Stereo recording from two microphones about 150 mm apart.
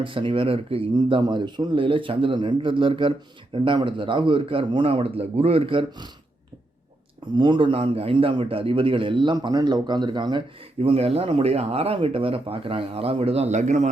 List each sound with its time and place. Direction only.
0.0 s a man's voice: 35° right (ahead or behind)
7.3 s a man's voice: 35° right (ahead or behind); by 13.9 s 50° right (ahead or behind)